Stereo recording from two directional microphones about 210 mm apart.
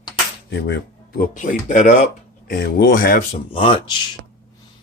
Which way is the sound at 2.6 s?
50° left (ahead or behind).